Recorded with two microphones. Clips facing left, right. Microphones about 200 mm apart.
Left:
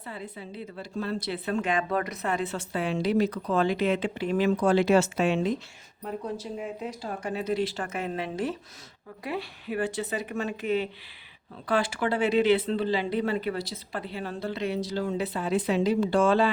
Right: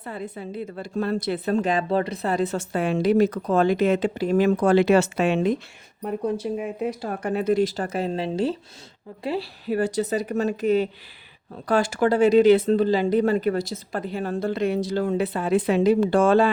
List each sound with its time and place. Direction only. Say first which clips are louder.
0.0 s a woman's voice: right 6 dB; 50° right (ahead or behind)